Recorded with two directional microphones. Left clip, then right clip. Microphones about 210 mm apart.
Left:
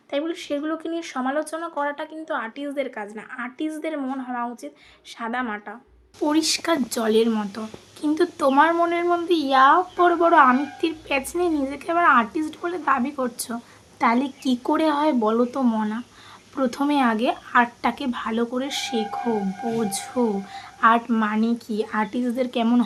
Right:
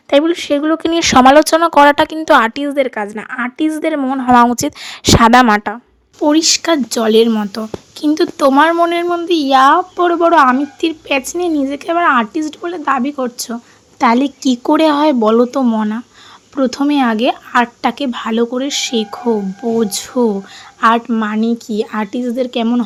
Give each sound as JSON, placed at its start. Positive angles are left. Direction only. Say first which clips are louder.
{"t": 0.1, "sound": "speech", "louder": "right 14 dB", "side_deg": -50}
{"t": 6.2, "sound": "speech", "louder": "right 10 dB", "side_deg": -35}